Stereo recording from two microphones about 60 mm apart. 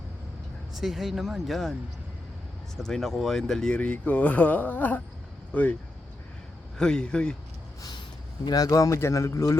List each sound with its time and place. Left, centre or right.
0.7 s speech: centre
2.8 s speech: centre
3.8 s speech: left
6.7 s speech: centre
8.5 s a man's voice: left